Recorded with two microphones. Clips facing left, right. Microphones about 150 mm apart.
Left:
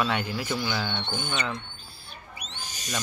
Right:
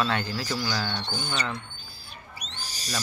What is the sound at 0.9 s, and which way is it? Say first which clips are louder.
Speech: left 1 dB; 35° right (ahead or behind).